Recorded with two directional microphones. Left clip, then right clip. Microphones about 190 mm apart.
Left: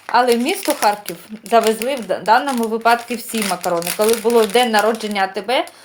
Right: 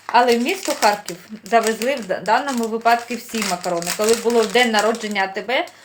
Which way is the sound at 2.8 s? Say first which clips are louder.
Left 1 dB; 40° left (ahead or behind).